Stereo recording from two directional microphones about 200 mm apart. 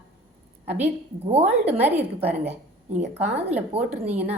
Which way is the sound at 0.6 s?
10° right (ahead or behind).